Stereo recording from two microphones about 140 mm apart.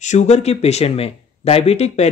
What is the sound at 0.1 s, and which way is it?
Speech, 50° left (ahead or behind).